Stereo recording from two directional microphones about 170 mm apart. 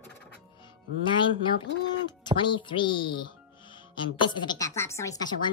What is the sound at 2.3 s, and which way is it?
Speech, 30° left (ahead or behind).